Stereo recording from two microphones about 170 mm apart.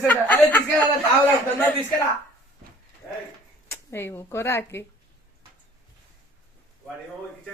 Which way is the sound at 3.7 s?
15° left (ahead or behind).